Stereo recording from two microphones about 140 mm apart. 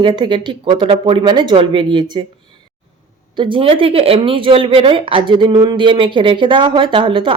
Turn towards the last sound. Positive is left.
turn(degrees=-35)  # may be behind; listen again after turning